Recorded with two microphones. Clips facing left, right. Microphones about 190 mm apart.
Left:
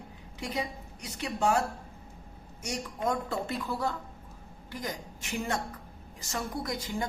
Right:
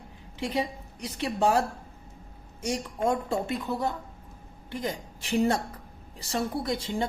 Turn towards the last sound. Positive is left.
turn(degrees=-25)  # may be behind; listen again after turning